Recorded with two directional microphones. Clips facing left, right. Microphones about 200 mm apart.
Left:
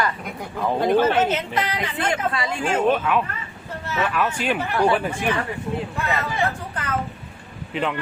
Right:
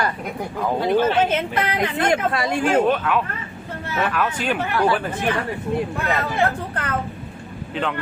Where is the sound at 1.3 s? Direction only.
55° right (ahead or behind).